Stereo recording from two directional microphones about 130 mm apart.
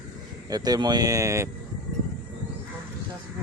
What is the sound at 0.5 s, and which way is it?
Speech, 30° right (ahead or behind).